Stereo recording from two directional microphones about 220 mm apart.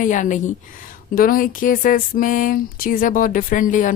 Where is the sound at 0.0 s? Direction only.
35° left (ahead or behind).